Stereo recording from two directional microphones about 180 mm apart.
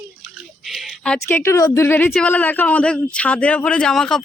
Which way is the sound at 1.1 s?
15° left (ahead or behind).